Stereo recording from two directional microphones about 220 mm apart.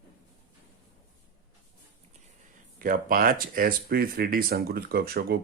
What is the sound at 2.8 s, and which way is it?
Speech, 40° right (ahead or behind).